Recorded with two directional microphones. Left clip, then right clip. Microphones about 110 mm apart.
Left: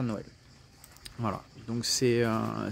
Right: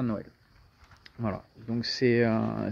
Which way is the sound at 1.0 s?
45° left (ahead or behind).